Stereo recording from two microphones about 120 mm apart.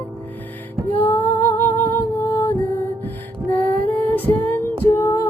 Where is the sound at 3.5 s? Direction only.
15° left (ahead or behind).